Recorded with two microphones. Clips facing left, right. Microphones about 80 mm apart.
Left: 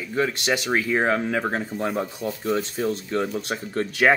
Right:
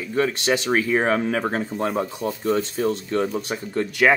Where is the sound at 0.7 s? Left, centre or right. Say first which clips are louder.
Right 1 dB; centre.